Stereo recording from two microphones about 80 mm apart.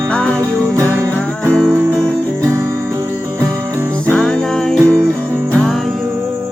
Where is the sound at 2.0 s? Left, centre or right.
Right.